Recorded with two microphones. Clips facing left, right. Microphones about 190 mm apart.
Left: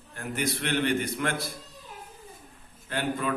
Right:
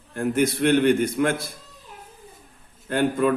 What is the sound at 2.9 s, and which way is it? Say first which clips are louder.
Speech: right 9 dB; 50° right (ahead or behind).